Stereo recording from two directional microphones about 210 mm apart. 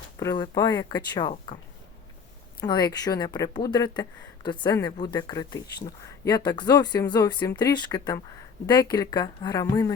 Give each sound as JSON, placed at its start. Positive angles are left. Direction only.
{"t": 0.2, "sound": "speech", "side_deg": 15}
{"t": 2.6, "sound": "speech", "side_deg": 20}